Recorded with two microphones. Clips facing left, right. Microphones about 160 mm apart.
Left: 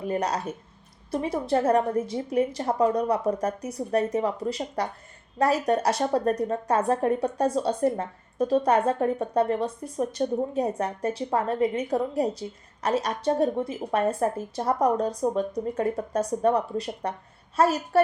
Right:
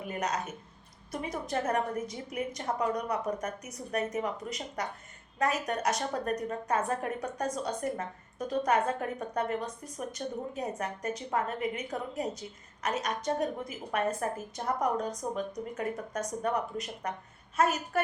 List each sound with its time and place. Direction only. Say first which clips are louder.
0.0 s a woman's voice: left 6 dB; 35° left (ahead or behind)